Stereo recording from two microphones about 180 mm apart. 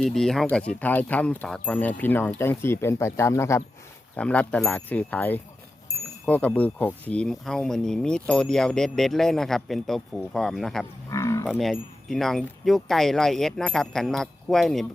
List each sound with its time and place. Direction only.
0.0 s speech: 5° left (ahead or behind)
11.1 s livestock: 15° left (ahead or behind)
11.4 s speech: centre (ahead or behind)